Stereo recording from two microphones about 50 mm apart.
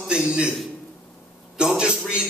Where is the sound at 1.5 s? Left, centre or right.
Centre.